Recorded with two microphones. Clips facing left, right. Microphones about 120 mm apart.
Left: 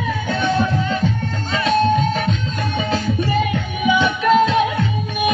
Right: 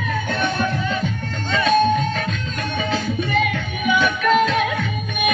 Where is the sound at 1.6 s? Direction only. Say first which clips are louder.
Left 1 dB; 25° left (ahead or behind).